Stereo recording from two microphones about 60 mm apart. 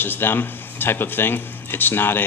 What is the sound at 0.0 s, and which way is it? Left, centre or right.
A man's voice, left.